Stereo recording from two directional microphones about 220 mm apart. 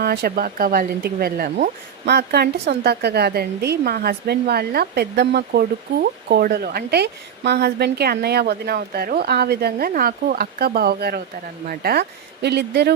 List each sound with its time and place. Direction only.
0.0 s speech: 45° right (ahead or behind)